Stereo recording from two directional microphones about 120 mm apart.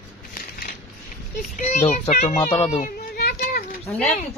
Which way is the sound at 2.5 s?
45° left (ahead or behind).